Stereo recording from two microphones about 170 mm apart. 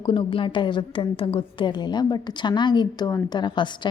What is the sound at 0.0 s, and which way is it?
A woman's voice, 30° left (ahead or behind).